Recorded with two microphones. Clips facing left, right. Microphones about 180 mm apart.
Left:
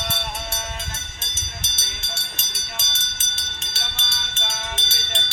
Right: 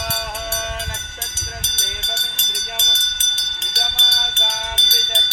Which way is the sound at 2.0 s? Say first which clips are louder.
Right 6 dB; 90° right.